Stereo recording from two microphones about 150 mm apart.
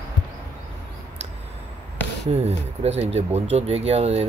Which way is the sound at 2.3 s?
45° right (ahead or behind).